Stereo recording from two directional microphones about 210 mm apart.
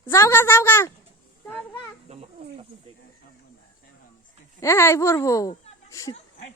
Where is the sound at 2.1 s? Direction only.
30° right (ahead or behind).